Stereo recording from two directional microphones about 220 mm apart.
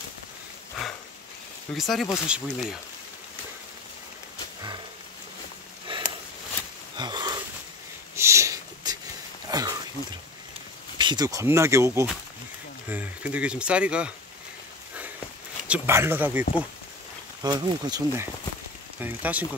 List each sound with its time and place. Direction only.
1.8 s speech: centre (ahead or behind)
5.9 s a sound: 20° right (ahead or behind)
7.0 s sniff: 20° right (ahead or behind)
9.5 s a sound: 15° right (ahead or behind)
11.0 s speech: 20° right (ahead or behind)
15.7 s speech: 10° right (ahead or behind)
17.4 s speech: 20° right (ahead or behind)